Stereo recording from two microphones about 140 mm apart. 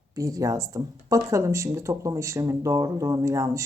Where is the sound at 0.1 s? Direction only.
25° right (ahead or behind).